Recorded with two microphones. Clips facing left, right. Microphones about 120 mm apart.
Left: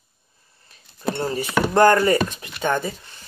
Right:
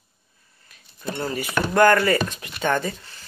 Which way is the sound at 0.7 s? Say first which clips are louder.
Even; 30° left (ahead or behind).